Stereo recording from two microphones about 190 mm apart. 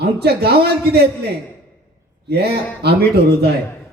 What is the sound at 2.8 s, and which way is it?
Speech, 55° right (ahead or behind).